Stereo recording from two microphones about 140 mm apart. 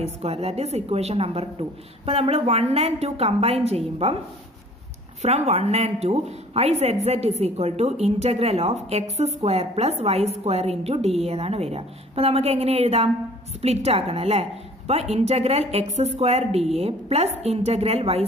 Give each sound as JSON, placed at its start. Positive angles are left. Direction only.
{"t": 0.0, "sound": "a woman's voice", "side_deg": -45}
{"t": 5.2, "sound": "a woman's voice", "side_deg": -50}